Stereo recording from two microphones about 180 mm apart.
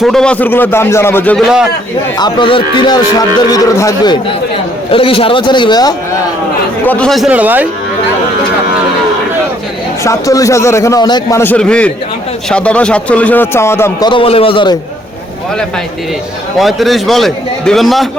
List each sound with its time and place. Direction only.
0.0 s a man's voice: 5° left (ahead or behind)
2.1 s a man's voice: 25° left (ahead or behind)
6.8 s a man's voice: 5° left (ahead or behind); by 7.7 s 10° right (ahead or behind)
10.0 s a man's voice: 15° left (ahead or behind)
14.1 s a man's voice: 30° left (ahead or behind)
16.6 s a man's voice: centre (ahead or behind)